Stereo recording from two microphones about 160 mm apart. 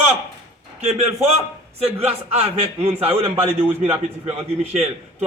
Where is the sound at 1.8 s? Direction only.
40° right (ahead or behind).